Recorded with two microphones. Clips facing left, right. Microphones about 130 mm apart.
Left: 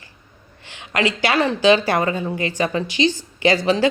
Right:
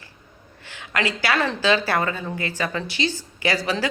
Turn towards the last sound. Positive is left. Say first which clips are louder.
# left 7 dB
turn(degrees=20)  # may be behind; listen again after turning